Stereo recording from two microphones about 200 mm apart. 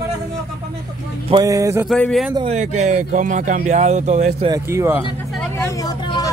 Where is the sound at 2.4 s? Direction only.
35° right (ahead or behind).